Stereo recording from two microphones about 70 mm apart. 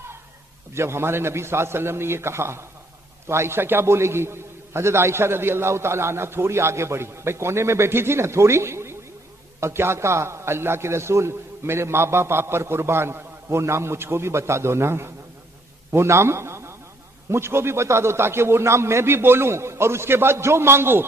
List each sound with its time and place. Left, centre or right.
0.7 s a man's voice: right